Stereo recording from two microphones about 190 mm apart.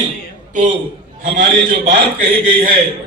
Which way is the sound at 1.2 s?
45° right (ahead or behind).